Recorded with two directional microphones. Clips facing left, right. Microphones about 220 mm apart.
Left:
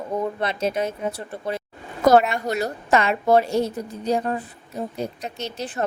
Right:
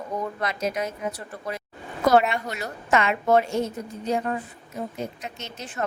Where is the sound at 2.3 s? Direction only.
40° left (ahead or behind).